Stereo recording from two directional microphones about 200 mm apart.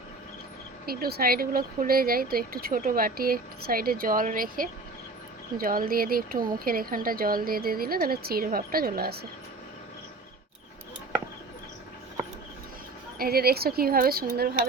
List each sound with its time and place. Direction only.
0.9 s speech: 50° right (ahead or behind)
13.1 s speech: 50° right (ahead or behind)